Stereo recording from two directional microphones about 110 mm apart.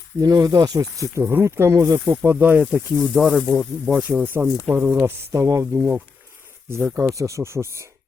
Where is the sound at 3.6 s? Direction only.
5° left (ahead or behind).